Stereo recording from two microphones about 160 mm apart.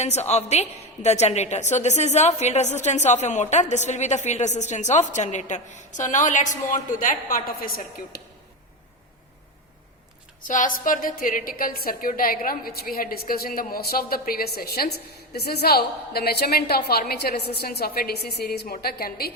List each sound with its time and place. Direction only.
0.0 s a woman's voice: 45° left (ahead or behind); by 7.7 s 60° left (ahead or behind)
8.1 s speech: 75° left (ahead or behind)
10.4 s a woman's voice: 55° left (ahead or behind); by 19.3 s 70° left (ahead or behind)